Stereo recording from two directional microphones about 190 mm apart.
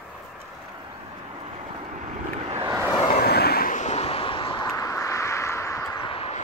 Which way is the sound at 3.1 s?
55° left (ahead or behind).